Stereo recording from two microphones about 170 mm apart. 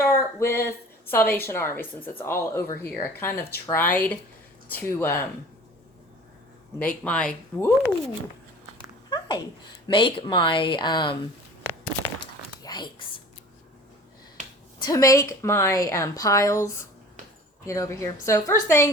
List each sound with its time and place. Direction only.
0.0 s a sound: 15° left (ahead or behind)
1.1 s a woman's voice: 10° left (ahead or behind)
6.7 s a woman's voice: 10° left (ahead or behind)
9.0 s speech: 25° left (ahead or behind)
11.6 s a sound: 15° left (ahead or behind)
12.6 s whispering: 25° left (ahead or behind)
14.8 s a woman's voice: 20° left (ahead or behind)